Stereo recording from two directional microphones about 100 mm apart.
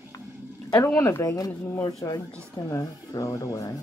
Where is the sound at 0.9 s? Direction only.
30° left (ahead or behind).